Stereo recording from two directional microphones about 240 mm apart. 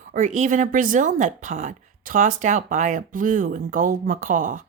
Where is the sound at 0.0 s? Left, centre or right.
Right.